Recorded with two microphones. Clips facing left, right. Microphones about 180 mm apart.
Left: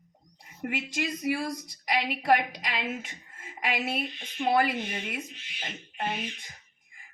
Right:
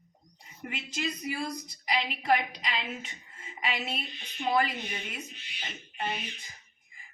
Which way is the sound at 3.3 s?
50° left (ahead or behind).